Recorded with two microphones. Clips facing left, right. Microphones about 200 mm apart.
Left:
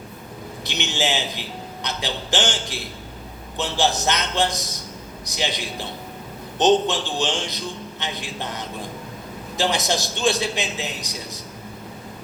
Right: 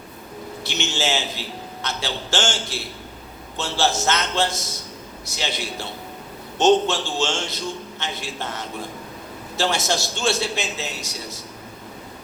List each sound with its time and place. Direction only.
0.6 s a man's voice: 15° left (ahead or behind)